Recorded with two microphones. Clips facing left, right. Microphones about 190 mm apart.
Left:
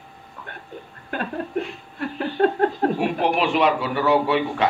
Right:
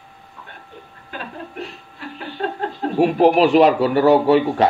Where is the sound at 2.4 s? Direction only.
55° left (ahead or behind).